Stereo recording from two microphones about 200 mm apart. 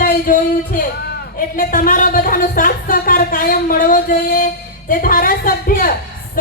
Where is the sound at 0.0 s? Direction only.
45° left (ahead or behind).